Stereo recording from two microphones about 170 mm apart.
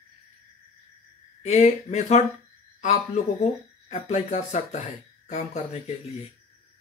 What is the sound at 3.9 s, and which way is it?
Speech, 45° left (ahead or behind).